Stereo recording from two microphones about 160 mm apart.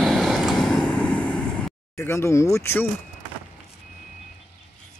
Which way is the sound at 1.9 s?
15° left (ahead or behind).